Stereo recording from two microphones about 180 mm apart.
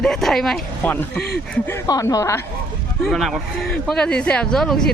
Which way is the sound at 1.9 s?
20° left (ahead or behind).